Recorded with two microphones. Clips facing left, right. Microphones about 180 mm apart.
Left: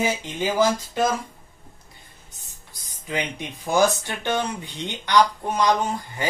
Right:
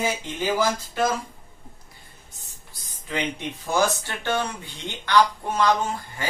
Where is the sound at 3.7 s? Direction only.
15° left (ahead or behind).